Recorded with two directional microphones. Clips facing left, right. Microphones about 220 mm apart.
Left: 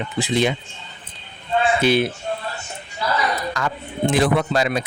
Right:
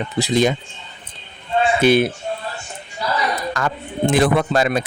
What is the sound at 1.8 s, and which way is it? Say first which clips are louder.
Speech: right 5 dB; 50° right (ahead or behind).